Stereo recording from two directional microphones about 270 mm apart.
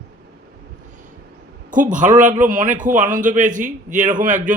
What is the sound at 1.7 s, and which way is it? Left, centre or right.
A man's voice, right.